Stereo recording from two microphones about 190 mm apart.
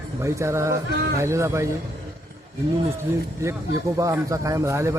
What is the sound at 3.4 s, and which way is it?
A man's voice, 15° right (ahead or behind).